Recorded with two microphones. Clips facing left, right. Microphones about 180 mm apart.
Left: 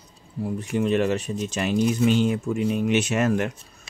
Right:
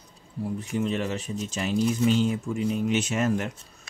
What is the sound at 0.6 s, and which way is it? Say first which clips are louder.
Speech: left 6 dB; 65° left (ahead or behind).